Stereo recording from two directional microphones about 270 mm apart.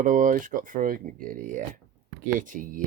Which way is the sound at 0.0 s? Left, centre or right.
Right.